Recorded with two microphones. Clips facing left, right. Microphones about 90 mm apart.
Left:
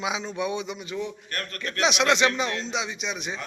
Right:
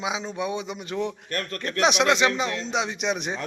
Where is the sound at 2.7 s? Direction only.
55° right (ahead or behind).